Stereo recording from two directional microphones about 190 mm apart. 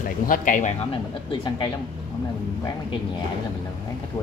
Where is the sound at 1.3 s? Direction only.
25° left (ahead or behind).